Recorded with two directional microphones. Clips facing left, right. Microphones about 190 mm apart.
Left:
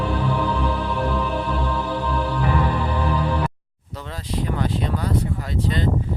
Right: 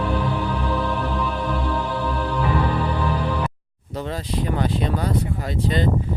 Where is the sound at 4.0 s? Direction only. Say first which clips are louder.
Right 3 dB; 20° right (ahead or behind).